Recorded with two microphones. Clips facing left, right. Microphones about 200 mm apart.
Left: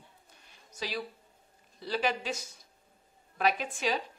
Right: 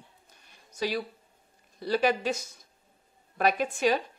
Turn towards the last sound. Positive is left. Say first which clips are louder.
# right 6 dB
turn(degrees=-50)  # may be behind; listen again after turning